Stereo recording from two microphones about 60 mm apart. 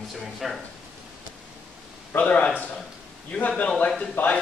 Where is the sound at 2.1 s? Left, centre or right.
Left.